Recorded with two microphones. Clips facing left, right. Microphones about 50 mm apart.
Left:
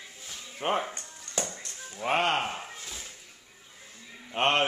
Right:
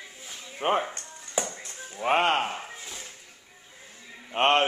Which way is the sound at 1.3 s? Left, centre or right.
Centre.